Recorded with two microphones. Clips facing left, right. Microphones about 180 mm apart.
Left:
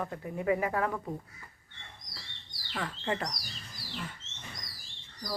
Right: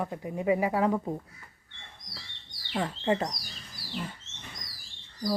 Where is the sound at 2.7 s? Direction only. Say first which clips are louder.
Right 6 dB; 25° right (ahead or behind).